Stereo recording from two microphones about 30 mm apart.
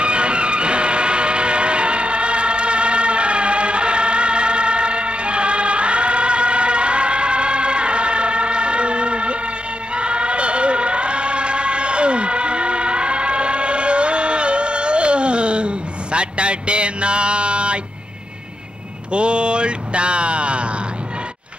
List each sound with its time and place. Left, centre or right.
0.0 s vehicle: right
9.9 s choir: right
19.1 s a sound: right